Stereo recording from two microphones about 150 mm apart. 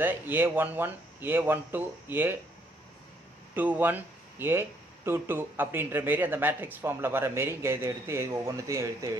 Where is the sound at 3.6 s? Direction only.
10° right (ahead or behind).